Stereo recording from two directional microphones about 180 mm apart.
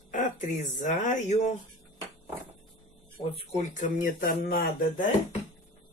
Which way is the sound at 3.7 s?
50° left (ahead or behind).